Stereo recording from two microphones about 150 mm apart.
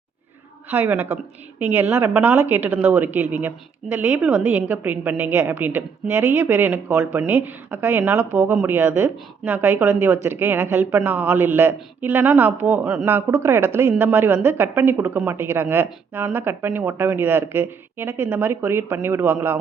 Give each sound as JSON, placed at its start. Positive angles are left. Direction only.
{"t": 0.7, "sound": "a woman's voice", "side_deg": -15}